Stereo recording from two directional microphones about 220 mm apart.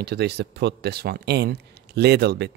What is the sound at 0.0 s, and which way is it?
A man's voice, 50° right (ahead or behind).